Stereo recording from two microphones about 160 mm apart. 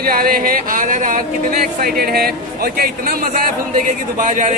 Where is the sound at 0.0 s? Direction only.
65° right (ahead or behind).